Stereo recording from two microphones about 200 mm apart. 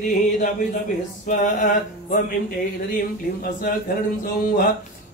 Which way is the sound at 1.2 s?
40° left (ahead or behind).